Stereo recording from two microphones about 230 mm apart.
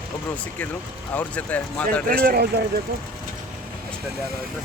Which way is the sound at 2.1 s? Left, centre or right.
Right.